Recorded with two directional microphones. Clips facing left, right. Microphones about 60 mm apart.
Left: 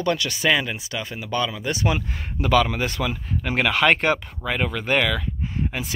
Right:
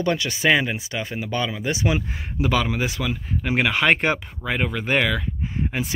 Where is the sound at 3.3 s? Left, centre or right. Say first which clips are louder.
Right 1 dB; centre.